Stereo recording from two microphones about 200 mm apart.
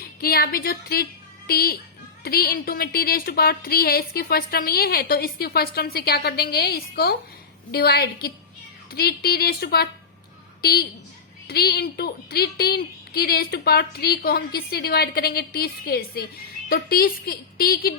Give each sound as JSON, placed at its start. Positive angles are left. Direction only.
{"t": 0.2, "sound": "a woman's voice", "side_deg": 50}